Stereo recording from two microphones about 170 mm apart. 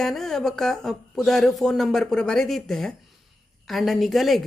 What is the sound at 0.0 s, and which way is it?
A woman's voice, centre (ahead or behind).